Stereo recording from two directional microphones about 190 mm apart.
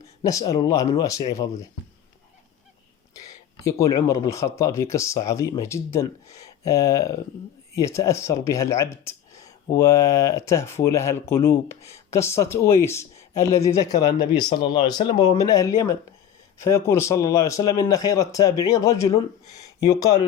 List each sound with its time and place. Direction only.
0.2 s speech: 20° left (ahead or behind)
3.2 s speech: 15° left (ahead or behind)